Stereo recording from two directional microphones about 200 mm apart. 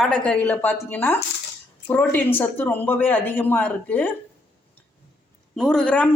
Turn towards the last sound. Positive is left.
turn(degrees=5)  # may be behind; listen again after turning